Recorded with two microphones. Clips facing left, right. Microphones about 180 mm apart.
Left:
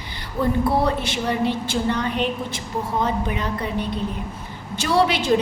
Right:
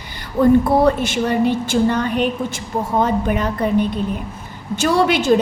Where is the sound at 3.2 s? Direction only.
50° right (ahead or behind).